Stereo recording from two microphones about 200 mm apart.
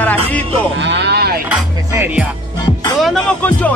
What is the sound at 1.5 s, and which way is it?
Speech, 10° right (ahead or behind).